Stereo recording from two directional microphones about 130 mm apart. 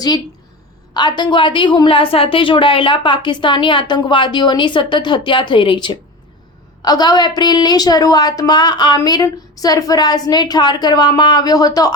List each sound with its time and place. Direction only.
0.9 s a woman's voice: 35° left (ahead or behind)